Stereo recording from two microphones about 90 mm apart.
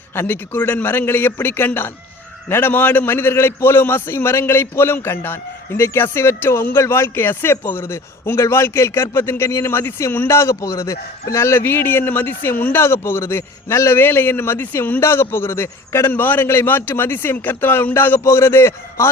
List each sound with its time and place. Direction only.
0.1 s a man's voice: 25° left (ahead or behind)